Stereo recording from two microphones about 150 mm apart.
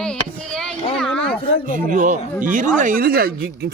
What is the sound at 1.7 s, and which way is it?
Speech, 60° right (ahead or behind).